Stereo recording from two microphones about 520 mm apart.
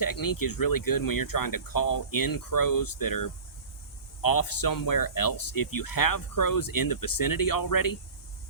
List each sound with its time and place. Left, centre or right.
0.0 s speech: left